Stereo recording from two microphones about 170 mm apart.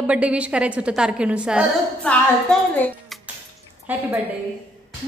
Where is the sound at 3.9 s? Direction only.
10° right (ahead or behind).